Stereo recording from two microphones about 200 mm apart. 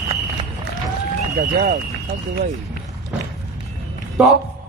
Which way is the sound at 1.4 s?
40° right (ahead or behind).